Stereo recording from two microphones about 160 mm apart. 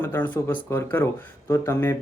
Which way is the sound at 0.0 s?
15° left (ahead or behind).